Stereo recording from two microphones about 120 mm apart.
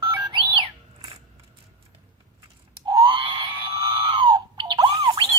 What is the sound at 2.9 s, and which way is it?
Screaming, 45° right (ahead or behind).